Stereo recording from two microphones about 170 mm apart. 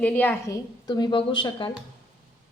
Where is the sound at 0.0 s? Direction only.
10° left (ahead or behind); by 1.7 s 30° left (ahead or behind).